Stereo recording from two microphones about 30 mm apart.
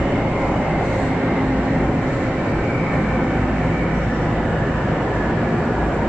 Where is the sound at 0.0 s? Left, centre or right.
Centre.